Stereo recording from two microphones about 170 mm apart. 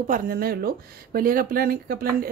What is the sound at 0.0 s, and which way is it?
Speech, 55° right (ahead or behind).